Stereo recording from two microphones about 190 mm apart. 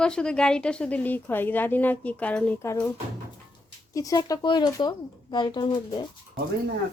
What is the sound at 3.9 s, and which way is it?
Speech, 20° left (ahead or behind).